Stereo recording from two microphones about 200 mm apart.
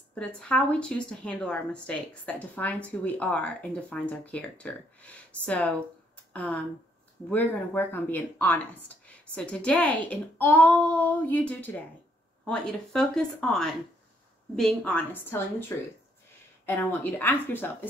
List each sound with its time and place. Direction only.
0.1 s speech: 5° left (ahead or behind)